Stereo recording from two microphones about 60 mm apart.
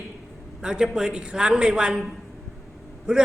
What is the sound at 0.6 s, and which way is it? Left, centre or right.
A man's voice, centre.